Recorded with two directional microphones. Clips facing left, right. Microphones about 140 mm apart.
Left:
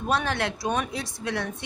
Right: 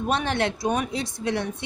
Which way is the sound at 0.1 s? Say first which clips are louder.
Right 1 dB; 25° right (ahead or behind).